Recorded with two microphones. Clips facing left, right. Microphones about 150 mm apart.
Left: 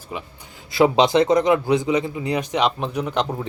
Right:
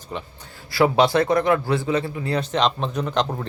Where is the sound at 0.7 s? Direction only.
20° left (ahead or behind).